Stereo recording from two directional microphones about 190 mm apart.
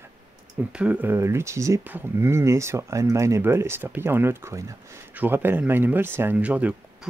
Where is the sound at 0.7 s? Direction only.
5° right (ahead or behind).